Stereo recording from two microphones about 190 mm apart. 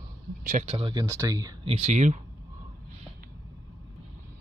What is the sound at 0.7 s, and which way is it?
Speech, 25° right (ahead or behind).